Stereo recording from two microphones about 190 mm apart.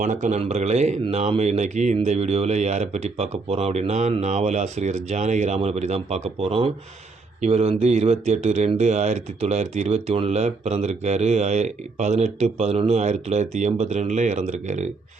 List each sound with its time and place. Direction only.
0.0 s speech: 40° right (ahead or behind)